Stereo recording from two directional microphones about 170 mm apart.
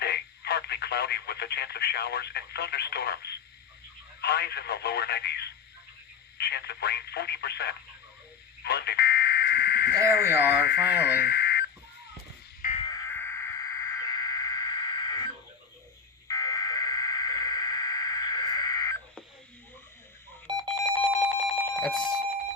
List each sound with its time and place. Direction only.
0.0 s speech: 75° left (ahead or behind)
8.6 s buzzer: 75° left (ahead or behind)
10.0 s speech: 15° right (ahead or behind)
11.2 s radio: 75° left (ahead or behind)
12.8 s a sound: 20° left (ahead or behind)
16.3 s buzzer: 20° left (ahead or behind)
20.5 s alarm clock: 25° right (ahead or behind)
21.3 s telephone bell ringing: centre (ahead or behind)